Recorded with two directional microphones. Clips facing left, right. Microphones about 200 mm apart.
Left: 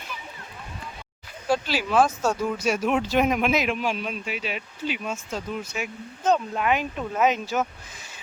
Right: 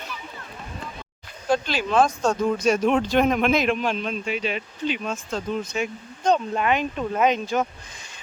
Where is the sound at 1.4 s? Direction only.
5° left (ahead or behind).